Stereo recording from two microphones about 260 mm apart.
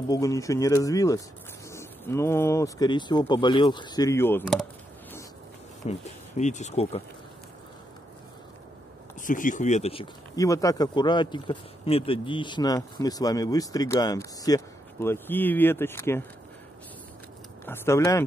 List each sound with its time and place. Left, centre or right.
0.1 s speech: centre
5.9 s speech: left
9.2 s speech: left; by 16.3 s centre
17.6 s speech: centre